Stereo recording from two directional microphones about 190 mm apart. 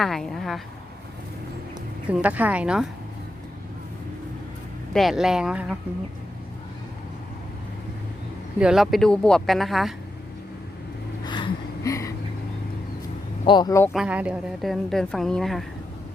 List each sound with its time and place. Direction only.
0.0 s a woman's voice: centre (ahead or behind)
2.0 s a woman's voice: 5° right (ahead or behind)
4.9 s a woman's voice: centre (ahead or behind)
8.5 s a woman's voice: 5° right (ahead or behind)
11.2 s a sound: 25° left (ahead or behind)
13.4 s speech: 25° left (ahead or behind)
13.9 s a woman's voice: 5° right (ahead or behind)